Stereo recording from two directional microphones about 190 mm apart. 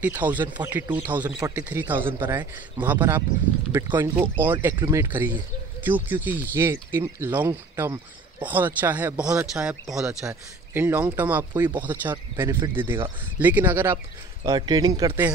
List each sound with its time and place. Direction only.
0.0 s speech: 10° right (ahead or behind)
14.4 s speech: 20° right (ahead or behind)